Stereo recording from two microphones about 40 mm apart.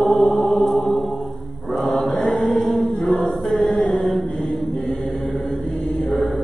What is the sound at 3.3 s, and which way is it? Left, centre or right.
Choir, left.